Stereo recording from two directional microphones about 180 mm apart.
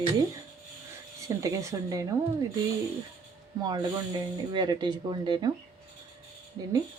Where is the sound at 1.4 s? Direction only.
15° right (ahead or behind).